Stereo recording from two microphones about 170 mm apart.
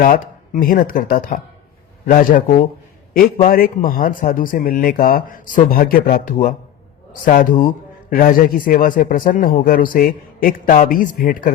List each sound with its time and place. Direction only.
0.0 s a man's voice: 55° left (ahead or behind)